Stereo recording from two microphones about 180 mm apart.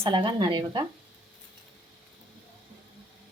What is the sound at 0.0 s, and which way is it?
Speech, 25° right (ahead or behind).